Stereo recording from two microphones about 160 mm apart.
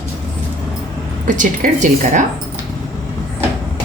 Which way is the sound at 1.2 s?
55° right (ahead or behind).